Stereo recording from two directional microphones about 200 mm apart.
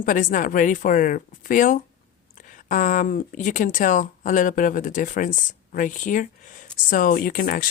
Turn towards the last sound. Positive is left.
turn(degrees=45)  # may be behind; listen again after turning